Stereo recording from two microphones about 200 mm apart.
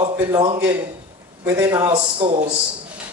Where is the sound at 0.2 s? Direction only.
15° right (ahead or behind).